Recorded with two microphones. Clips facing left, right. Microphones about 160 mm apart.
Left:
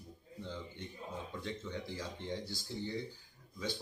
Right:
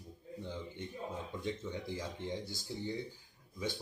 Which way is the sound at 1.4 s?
15° right (ahead or behind).